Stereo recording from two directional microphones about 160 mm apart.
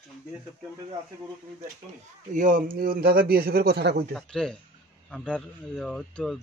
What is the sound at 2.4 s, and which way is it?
A man's voice, 55° right (ahead or behind).